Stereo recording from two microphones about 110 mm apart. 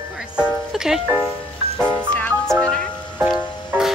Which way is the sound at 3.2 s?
5° right (ahead or behind).